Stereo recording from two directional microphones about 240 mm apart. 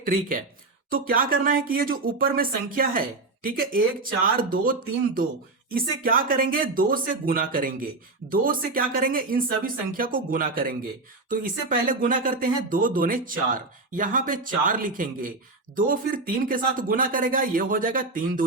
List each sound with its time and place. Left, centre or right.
0.0 s speech: right